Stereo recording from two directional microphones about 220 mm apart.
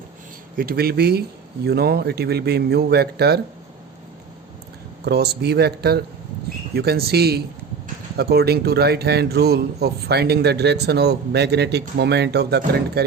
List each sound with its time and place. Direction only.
0.5 s speech: 40° right (ahead or behind)
5.0 s speech: 50° right (ahead or behind)